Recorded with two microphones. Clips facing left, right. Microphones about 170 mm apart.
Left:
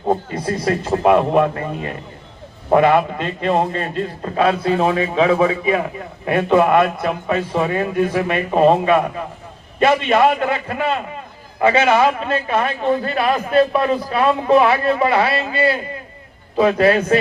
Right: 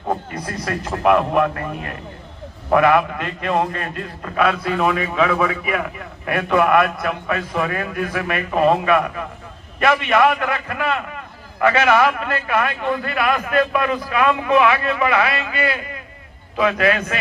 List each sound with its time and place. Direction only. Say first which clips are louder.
0.1 s a man's voice: left 5 dB; 25° left (ahead or behind)